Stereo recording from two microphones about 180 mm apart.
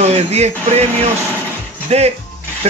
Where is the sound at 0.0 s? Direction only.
35° right (ahead or behind).